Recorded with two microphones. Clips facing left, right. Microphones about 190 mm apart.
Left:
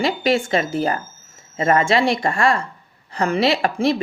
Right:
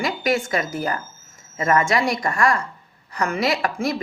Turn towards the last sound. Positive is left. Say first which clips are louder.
# left 4 dB
turn(degrees=30)  # may be behind; listen again after turning